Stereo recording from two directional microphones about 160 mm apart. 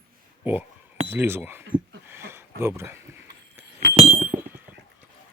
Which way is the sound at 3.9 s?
35° right (ahead or behind).